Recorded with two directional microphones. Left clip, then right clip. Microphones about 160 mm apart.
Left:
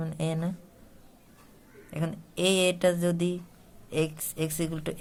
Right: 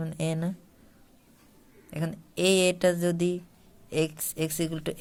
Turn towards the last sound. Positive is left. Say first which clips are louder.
# right 1 dB
turn(degrees=-25)  # may be behind; listen again after turning